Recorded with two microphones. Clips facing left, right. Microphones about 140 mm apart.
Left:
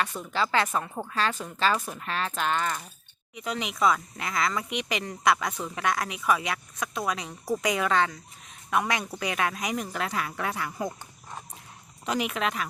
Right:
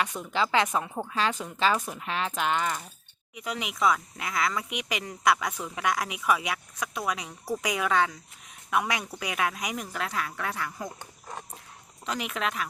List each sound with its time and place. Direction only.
0.0 s speech: 15° right (ahead or behind); by 10.8 s 10° left (ahead or behind)
12.0 s speech: 5° left (ahead or behind)